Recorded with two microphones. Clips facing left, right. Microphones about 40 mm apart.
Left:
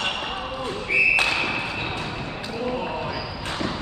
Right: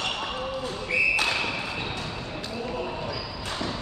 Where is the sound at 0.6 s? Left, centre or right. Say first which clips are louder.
Left 5 dB; left.